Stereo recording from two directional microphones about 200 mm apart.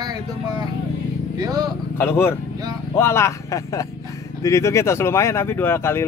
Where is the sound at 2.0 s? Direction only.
10° left (ahead or behind).